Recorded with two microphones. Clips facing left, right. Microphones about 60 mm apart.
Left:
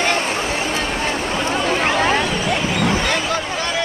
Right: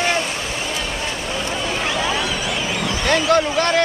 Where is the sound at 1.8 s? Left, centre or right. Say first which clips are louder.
Left 3 dB; left.